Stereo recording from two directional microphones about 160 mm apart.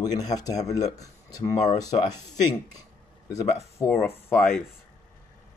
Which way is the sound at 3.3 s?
20° left (ahead or behind).